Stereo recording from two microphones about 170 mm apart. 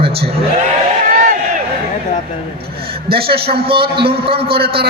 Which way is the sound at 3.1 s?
65° right (ahead or behind).